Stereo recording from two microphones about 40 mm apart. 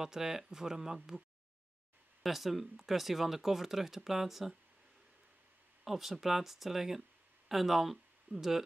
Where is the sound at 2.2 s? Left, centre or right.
Centre.